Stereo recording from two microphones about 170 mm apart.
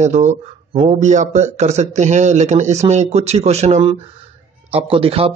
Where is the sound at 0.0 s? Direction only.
45° right (ahead or behind).